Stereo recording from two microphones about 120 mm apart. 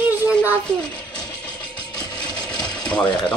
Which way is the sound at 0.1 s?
15° right (ahead or behind).